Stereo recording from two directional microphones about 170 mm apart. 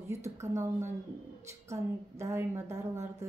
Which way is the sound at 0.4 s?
15° right (ahead or behind).